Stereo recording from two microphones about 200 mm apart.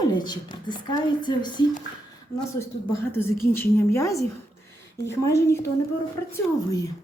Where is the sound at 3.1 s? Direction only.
10° left (ahead or behind).